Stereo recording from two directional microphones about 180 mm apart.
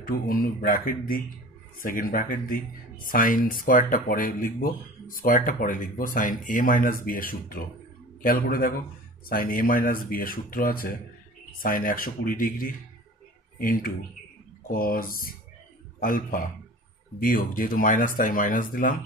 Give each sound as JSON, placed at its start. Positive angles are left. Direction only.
{"t": 0.0, "sound": "speech", "side_deg": 55}